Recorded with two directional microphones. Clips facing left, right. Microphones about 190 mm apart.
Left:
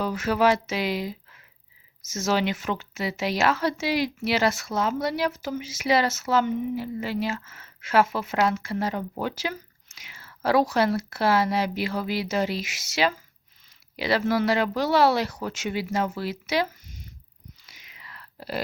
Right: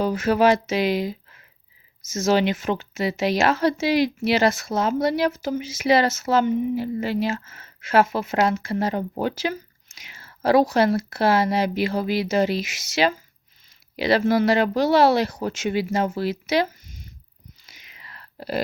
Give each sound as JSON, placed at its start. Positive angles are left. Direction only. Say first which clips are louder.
{"t": 0.3, "sound": "speech", "louder": "right 3 dB", "side_deg": -20}
{"t": 18.3, "sound": "speech", "louder": "right 5 dB", "side_deg": -20}